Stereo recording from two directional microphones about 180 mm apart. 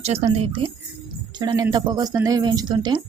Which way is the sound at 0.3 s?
30° right (ahead or behind).